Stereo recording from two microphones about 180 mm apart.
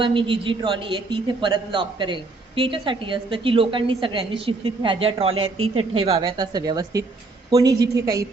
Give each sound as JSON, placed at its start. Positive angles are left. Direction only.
{"t": 0.0, "sound": "a woman's voice", "side_deg": -30}